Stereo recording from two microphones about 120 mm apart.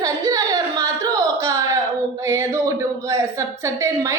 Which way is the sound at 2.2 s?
20° right (ahead or behind).